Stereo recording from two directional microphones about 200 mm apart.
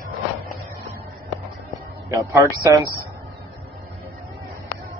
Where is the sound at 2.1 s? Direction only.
15° right (ahead or behind).